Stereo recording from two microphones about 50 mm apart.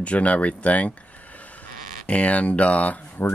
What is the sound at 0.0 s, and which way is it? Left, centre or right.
Speech, left.